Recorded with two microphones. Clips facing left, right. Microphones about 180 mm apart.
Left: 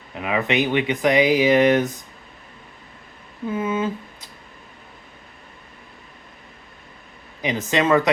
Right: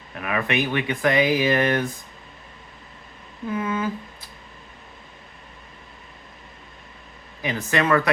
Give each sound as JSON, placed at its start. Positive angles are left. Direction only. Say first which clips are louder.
{"t": 0.1, "sound": "speech", "louder": "left 3 dB", "side_deg": 20}
{"t": 3.5, "sound": "speech", "louder": "left 2 dB", "side_deg": 25}
{"t": 7.7, "sound": "speech", "louder": "left 2 dB", "side_deg": 20}